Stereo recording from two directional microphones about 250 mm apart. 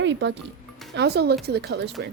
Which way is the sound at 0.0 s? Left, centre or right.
Right.